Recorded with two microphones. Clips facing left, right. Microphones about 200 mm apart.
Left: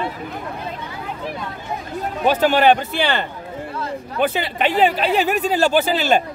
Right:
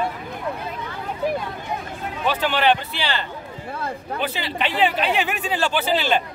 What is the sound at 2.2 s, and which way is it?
Speech, 45° left (ahead or behind).